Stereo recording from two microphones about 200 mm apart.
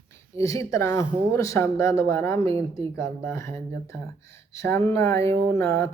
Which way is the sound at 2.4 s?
30° right (ahead or behind).